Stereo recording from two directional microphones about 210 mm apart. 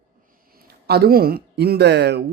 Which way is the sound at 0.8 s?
50° right (ahead or behind).